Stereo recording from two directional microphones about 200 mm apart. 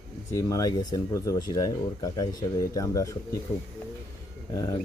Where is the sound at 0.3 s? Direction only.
15° left (ahead or behind).